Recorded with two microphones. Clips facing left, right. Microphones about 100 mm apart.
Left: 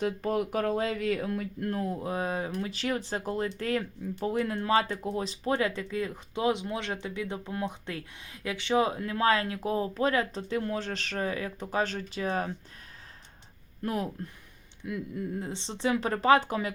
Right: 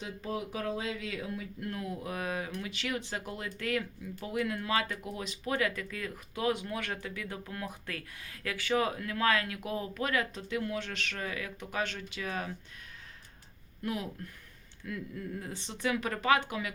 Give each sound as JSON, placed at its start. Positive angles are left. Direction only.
{"t": 0.0, "sound": "speech", "side_deg": 55}
{"t": 1.7, "sound": "speech", "side_deg": 35}
{"t": 13.8, "sound": "speech", "side_deg": 40}
{"t": 14.8, "sound": "speech", "side_deg": 20}